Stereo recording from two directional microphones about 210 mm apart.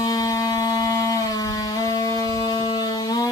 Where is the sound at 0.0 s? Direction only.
15° left (ahead or behind).